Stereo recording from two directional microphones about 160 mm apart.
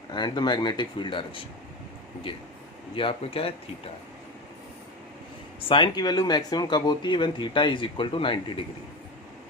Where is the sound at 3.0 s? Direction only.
35° left (ahead or behind).